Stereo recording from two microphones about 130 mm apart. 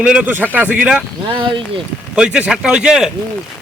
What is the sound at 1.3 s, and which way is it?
Speech, 40° right (ahead or behind).